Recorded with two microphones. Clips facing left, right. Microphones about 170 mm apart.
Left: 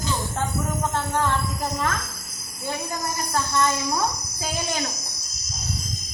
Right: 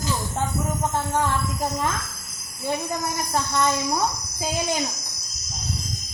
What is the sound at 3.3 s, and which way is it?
Speech, 20° right (ahead or behind).